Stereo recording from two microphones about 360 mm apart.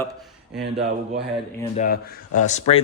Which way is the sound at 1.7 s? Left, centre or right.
Left.